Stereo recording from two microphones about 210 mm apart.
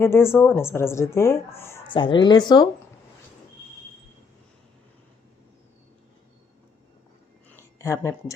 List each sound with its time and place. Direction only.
0.0 s speech: 10° left (ahead or behind)
1.9 s speech: 25° left (ahead or behind)
7.5 s a sound: 15° left (ahead or behind)